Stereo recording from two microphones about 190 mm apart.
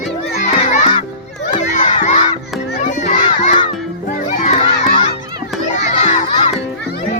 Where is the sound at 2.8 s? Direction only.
40° left (ahead or behind).